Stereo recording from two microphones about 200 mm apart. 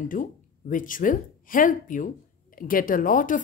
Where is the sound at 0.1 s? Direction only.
40° left (ahead or behind).